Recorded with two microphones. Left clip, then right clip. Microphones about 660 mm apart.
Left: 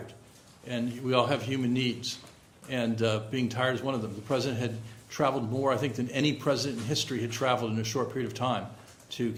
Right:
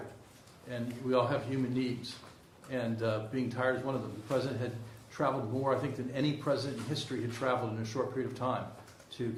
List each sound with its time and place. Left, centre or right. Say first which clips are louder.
0.7 s a man's voice: left 3 dB; left
2.6 s a man's voice: left 5 dB; left